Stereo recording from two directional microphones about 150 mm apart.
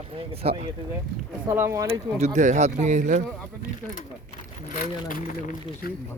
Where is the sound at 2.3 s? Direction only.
55° right (ahead or behind).